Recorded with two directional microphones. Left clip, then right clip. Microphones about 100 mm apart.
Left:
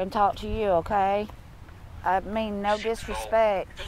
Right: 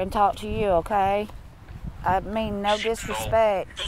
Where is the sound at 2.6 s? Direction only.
20° right (ahead or behind).